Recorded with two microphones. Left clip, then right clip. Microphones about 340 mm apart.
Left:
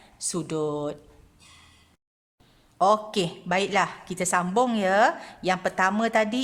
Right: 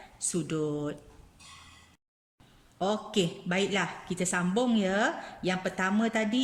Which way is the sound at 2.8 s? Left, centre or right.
Centre.